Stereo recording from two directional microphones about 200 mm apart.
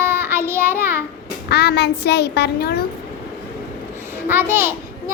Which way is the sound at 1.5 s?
55° left (ahead or behind).